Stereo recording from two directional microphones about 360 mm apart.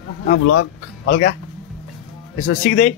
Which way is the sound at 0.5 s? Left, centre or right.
Left.